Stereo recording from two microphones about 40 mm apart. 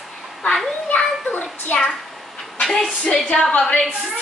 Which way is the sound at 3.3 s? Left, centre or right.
Left.